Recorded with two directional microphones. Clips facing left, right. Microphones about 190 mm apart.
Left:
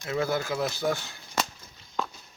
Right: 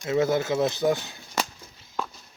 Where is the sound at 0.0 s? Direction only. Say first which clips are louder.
Right 5 dB; 20° right (ahead or behind).